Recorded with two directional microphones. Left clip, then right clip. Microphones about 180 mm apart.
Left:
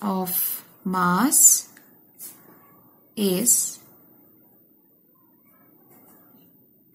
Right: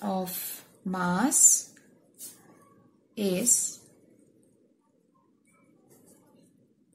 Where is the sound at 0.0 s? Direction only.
20° left (ahead or behind).